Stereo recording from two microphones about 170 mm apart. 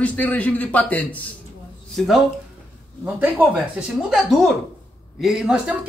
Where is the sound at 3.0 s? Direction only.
10° right (ahead or behind).